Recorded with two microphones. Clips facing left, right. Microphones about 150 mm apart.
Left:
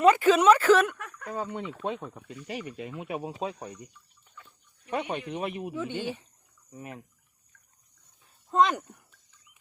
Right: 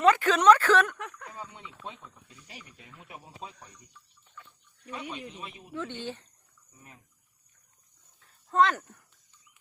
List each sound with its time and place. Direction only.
0.0 s speech: 10° left (ahead or behind)
1.3 s speech: 65° left (ahead or behind); by 3.8 s 80° left
4.9 s speech: 60° left (ahead or behind)
5.7 s speech: 10° left (ahead or behind)
6.7 s speech: 80° left
8.2 s a sound: 15° left (ahead or behind)